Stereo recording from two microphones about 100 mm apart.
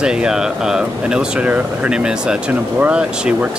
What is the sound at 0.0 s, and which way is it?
Speech, 10° right (ahead or behind).